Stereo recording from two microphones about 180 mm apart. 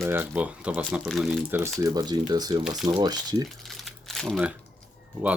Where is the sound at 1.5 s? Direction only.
10° right (ahead or behind).